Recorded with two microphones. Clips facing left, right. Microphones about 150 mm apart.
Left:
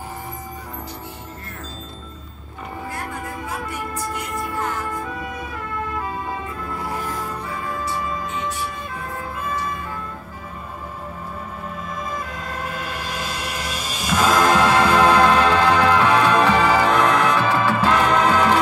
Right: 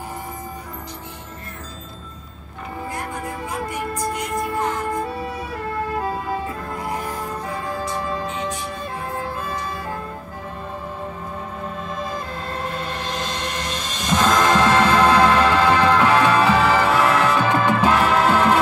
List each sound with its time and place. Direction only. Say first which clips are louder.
3.4 s music: right 4 dB; 20° right (ahead or behind)
5.0 s emergency vehicle: right 2 dB; 35° right (ahead or behind)
8.0 s music: right 1 dB; 35° right (ahead or behind)
9.4 s bell: left 1 dB; 35° right (ahead or behind)
12.0 s music: even; 30° right (ahead or behind)
12.6 s music: right 2 dB; 10° left (ahead or behind)
15.3 s music: even; 5° right (ahead or behind)
17.5 s music: right 1 dB; 20° right (ahead or behind)
17.9 s music: even; 5° right (ahead or behind)